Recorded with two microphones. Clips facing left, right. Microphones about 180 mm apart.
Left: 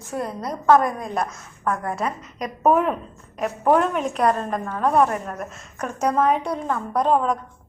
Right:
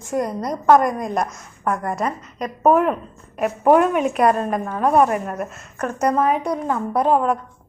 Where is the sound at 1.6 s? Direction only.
15° right (ahead or behind).